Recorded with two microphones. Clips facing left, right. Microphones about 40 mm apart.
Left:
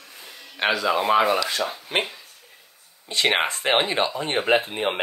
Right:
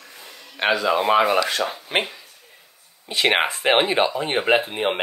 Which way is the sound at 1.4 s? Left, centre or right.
Right.